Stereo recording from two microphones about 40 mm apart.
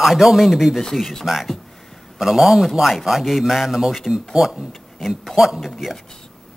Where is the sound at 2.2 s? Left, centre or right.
Centre.